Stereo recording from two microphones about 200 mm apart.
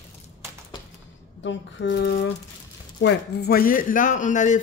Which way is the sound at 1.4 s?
60° left (ahead or behind).